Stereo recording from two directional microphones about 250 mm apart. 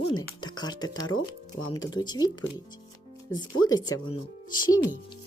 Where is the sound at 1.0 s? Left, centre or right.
Left.